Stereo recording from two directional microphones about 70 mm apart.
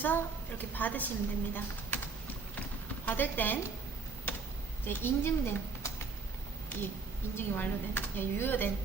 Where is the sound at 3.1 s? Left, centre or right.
Left.